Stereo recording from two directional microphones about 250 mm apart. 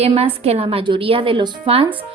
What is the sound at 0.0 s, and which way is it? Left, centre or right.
A woman's voice, right.